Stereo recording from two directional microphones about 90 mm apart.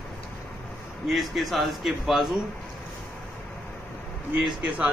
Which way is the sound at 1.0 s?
Centre (ahead or behind).